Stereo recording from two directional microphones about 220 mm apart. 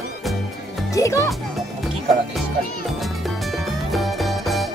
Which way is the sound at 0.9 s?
15° left (ahead or behind).